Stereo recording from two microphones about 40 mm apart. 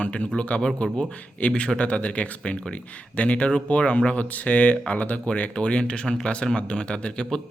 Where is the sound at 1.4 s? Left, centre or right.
Left.